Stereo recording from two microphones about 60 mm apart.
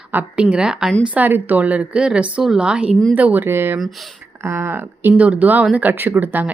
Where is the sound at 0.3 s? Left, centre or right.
Centre.